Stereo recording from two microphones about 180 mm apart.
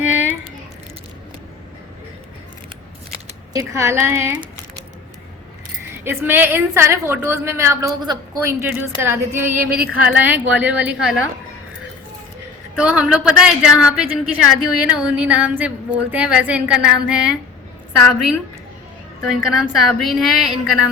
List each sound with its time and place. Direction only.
0.0 s a sound: 10° right (ahead or behind)
3.5 s a woman's voice: 15° right (ahead or behind)
6.1 s a woman's voice: 10° right (ahead or behind)
12.7 s a woman's voice: 5° right (ahead or behind)
19.3 s a woman's voice: centre (ahead or behind)